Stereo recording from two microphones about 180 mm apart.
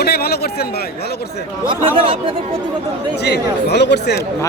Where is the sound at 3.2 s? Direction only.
65° left (ahead or behind).